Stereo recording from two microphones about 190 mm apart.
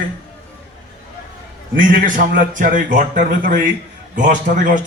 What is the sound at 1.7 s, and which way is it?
A man's voice, 45° right (ahead or behind).